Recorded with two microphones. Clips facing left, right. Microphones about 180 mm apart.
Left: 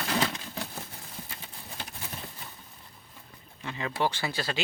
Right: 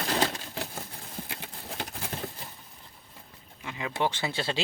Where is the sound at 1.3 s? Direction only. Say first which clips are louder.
Right 5 dB; 65° right (ahead or behind).